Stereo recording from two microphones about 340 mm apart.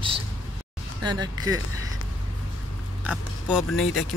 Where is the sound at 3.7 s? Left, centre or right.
Left.